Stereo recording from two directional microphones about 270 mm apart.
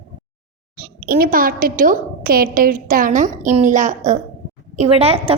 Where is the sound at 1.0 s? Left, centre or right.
Right.